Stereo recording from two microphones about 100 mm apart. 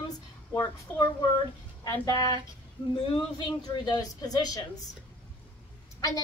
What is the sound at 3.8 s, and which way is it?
A woman's voice, 40° left (ahead or behind).